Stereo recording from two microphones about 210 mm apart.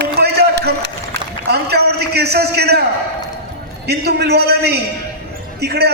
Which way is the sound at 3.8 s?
50° right (ahead or behind).